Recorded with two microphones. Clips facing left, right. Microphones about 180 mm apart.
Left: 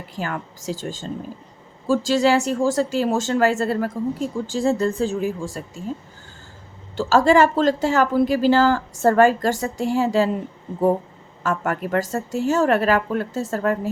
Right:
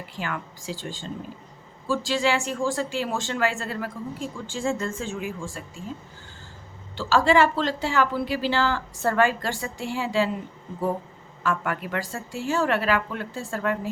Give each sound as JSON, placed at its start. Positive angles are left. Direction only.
{"t": 0.2, "sound": "a woman's voice", "side_deg": 40}
{"t": 6.9, "sound": "a woman's voice", "side_deg": 45}
{"t": 11.4, "sound": "a woman's voice", "side_deg": 45}